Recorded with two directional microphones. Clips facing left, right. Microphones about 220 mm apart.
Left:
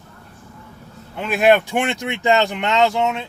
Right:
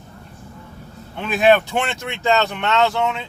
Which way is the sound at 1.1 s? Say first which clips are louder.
Even; 5° left (ahead or behind).